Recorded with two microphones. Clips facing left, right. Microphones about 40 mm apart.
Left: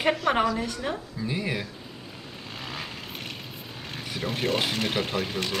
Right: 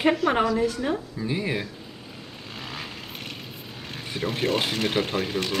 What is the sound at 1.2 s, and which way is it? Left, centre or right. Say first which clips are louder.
Speech: even; centre.